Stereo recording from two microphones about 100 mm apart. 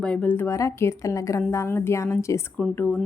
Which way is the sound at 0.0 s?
10° left (ahead or behind).